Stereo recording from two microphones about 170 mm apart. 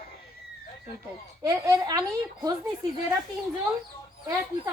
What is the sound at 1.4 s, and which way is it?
Speech, 20° right (ahead or behind).